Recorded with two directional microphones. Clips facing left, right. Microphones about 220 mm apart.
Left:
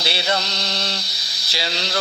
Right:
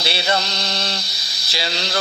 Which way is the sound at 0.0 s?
50° right (ahead or behind).